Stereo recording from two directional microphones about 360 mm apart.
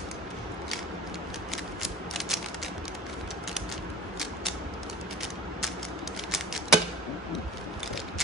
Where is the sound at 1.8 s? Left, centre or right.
Centre.